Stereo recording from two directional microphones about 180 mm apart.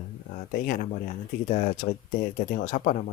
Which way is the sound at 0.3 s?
45° left (ahead or behind).